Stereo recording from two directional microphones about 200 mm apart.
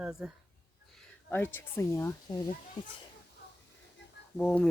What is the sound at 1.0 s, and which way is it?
Speech, 10° left (ahead or behind).